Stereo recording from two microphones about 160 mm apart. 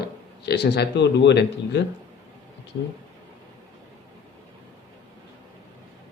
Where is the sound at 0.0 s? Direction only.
90° left.